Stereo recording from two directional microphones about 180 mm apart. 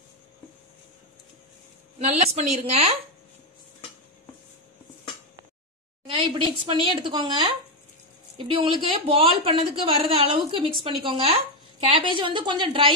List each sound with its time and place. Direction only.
2.0 s a woman's voice: 40° right (ahead or behind)
6.0 s a woman's voice: 30° right (ahead or behind)